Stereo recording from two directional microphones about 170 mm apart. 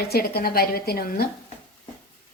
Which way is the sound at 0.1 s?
65° left (ahead or behind).